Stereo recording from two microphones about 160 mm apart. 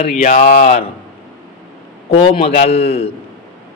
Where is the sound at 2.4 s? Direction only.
40° left (ahead or behind).